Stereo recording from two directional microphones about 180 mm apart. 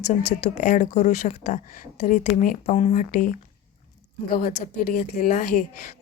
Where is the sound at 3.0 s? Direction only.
50° left (ahead or behind).